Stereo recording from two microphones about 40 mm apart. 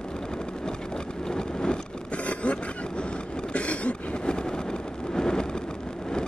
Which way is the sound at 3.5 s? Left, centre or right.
Left.